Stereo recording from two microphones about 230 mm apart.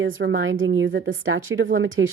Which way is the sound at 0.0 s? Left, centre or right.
Right.